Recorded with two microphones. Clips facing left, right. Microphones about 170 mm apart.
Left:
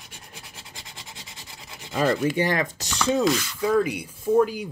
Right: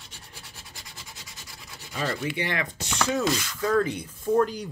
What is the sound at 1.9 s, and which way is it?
Speech, 40° left (ahead or behind).